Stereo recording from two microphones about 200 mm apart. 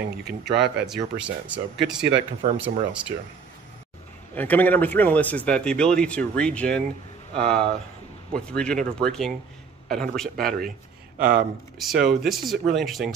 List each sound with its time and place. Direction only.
0.2 s speech: 55° right (ahead or behind)
0.8 s speech: centre (ahead or behind)
4.4 s speech: 10° left (ahead or behind)